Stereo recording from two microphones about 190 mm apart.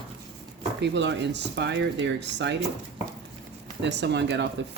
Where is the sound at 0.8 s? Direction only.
65° right (ahead or behind).